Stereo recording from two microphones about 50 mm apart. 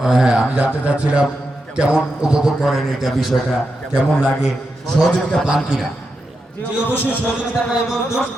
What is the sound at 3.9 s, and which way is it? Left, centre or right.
Speech, right.